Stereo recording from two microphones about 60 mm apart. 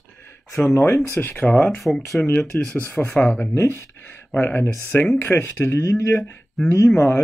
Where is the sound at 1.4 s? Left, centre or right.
Left.